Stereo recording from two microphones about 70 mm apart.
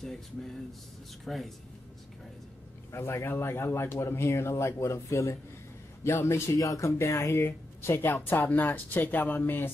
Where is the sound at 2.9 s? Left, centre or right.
Left.